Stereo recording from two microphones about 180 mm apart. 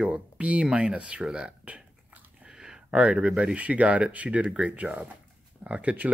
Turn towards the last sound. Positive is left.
turn(degrees=-10)  # may be behind; listen again after turning